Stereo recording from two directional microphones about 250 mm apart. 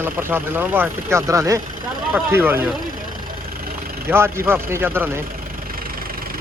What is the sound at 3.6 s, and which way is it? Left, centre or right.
Vehicle, right.